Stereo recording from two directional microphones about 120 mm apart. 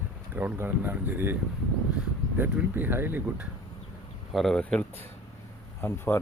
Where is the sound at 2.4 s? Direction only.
15° right (ahead or behind).